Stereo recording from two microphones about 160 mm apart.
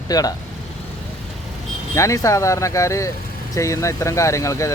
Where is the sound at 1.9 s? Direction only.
20° left (ahead or behind).